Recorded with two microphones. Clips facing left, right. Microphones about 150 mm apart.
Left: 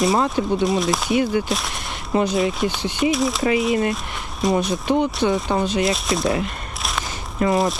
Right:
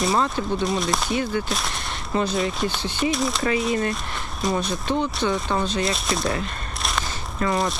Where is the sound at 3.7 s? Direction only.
20° left (ahead or behind).